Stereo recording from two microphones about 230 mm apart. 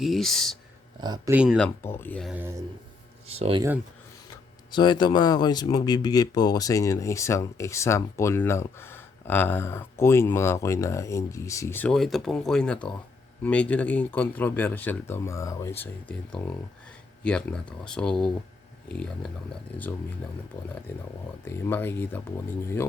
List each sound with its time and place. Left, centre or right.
0.0 s speech: centre
1.0 s speech: centre
2.3 s speech: centre
3.2 s speech: right
4.7 s speech: centre
21.4 s speech: centre